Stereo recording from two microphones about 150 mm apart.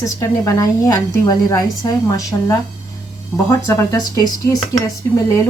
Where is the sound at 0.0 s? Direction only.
20° left (ahead or behind).